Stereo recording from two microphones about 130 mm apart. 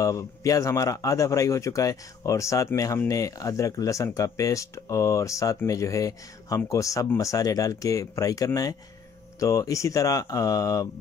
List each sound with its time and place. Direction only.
0.0 s a man's voice: 25° left (ahead or behind)